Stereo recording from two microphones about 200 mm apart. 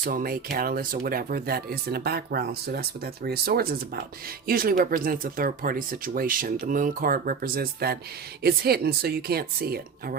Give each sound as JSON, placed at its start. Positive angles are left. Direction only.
{"t": 0.0, "sound": "speech", "side_deg": -45}